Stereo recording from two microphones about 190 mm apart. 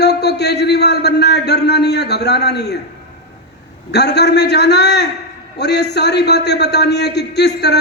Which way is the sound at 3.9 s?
60° left (ahead or behind).